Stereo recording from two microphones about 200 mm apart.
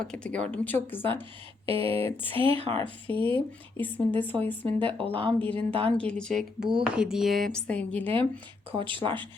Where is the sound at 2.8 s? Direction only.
10° left (ahead or behind).